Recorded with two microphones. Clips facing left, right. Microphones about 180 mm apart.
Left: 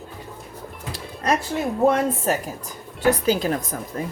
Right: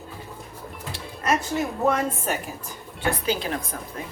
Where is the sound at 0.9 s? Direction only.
35° left (ahead or behind).